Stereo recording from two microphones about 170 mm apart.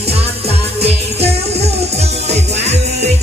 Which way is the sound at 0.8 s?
40° right (ahead or behind).